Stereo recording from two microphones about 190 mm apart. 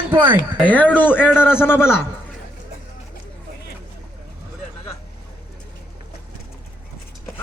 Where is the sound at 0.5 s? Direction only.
10° left (ahead or behind).